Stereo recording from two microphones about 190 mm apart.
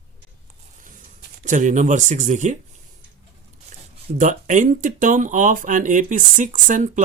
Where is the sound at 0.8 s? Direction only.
45° right (ahead or behind).